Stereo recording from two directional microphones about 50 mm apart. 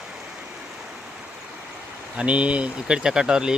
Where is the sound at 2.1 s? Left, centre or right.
Right.